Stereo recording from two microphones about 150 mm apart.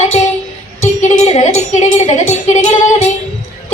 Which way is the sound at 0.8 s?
50° left (ahead or behind).